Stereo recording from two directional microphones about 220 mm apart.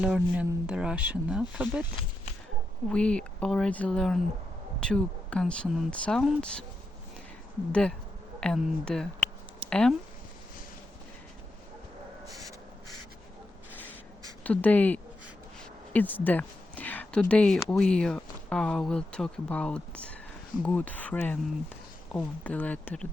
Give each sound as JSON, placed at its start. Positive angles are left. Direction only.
{"t": 0.0, "sound": "speech", "side_deg": -5}
{"t": 1.8, "sound": "speech", "side_deg": 20}
{"t": 2.9, "sound": "speech", "side_deg": 5}
{"t": 7.7, "sound": "speech", "side_deg": 5}
{"t": 12.2, "sound": "a sound", "side_deg": -15}
{"t": 14.4, "sound": "speech", "side_deg": 5}